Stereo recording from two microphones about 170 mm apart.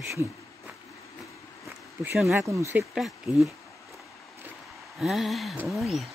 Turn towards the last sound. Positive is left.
turn(degrees=0)  # may be behind; listen again after turning